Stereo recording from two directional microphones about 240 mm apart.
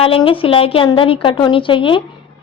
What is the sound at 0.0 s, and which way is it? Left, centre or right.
A woman's voice, left.